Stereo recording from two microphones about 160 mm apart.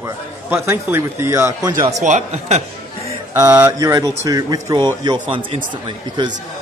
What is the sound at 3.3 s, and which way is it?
A man's voice, 20° right (ahead or behind).